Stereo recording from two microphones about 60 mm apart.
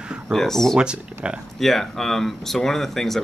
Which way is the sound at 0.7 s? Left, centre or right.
Centre.